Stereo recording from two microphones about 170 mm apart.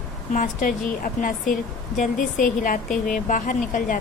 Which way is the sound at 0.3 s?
50° left (ahead or behind).